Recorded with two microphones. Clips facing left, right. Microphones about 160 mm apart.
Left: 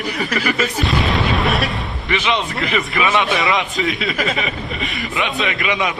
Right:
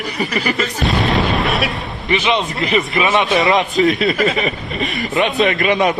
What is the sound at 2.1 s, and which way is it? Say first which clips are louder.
Speech: right 3 dB; 20° right (ahead or behind).